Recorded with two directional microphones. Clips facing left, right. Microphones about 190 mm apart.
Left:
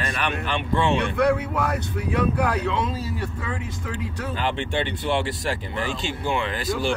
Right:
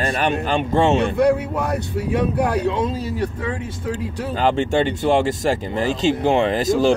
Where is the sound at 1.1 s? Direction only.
25° right (ahead or behind).